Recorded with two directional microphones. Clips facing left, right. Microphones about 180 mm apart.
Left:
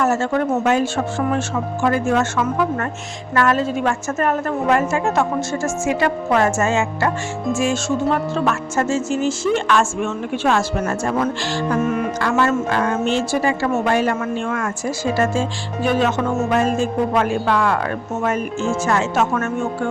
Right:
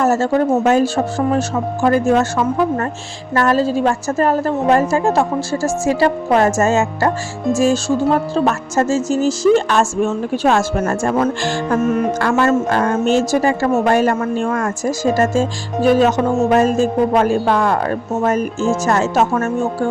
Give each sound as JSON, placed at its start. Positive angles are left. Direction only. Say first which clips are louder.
{"t": 0.0, "sound": "speech", "louder": "right 4 dB", "side_deg": -40}